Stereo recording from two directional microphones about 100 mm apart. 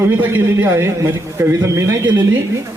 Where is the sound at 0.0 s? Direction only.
20° right (ahead or behind).